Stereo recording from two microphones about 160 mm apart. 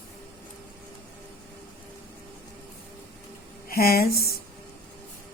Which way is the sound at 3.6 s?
70° left (ahead or behind).